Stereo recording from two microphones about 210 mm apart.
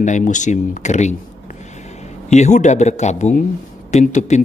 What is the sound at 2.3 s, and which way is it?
Speech, 35° left (ahead or behind).